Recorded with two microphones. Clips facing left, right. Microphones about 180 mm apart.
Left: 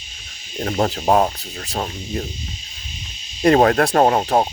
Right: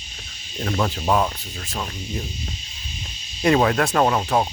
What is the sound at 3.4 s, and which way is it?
Speech, 50° left (ahead or behind).